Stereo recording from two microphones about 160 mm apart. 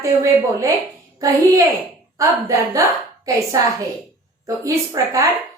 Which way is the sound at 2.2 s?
20° right (ahead or behind).